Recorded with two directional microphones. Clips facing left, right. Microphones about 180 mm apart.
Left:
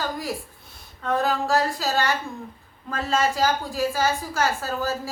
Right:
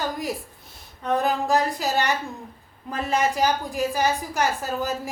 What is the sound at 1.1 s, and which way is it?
A woman's voice, 15° right (ahead or behind).